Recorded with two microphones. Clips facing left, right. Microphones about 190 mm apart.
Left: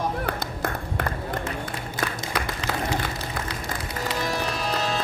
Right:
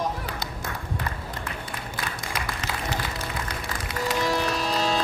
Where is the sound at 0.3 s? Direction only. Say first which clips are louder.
Left 5 dB; 55° left (ahead or behind).